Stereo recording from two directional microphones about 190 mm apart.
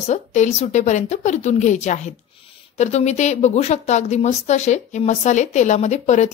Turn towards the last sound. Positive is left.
turn(degrees=35)  # may be behind; listen again after turning